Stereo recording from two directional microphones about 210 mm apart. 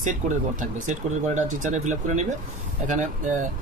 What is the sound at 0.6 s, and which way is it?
Speech, 35° right (ahead or behind).